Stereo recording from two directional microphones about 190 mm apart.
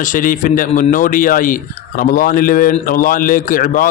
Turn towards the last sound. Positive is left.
turn(degrees=45)  # may be behind; listen again after turning